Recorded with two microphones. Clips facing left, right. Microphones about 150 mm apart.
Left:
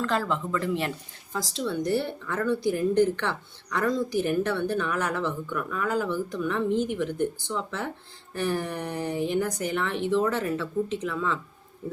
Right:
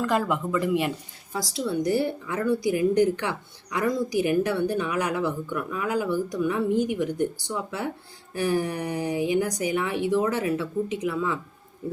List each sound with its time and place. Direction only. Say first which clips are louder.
0.0 s speech: right 2 dB; 15° right (ahead or behind)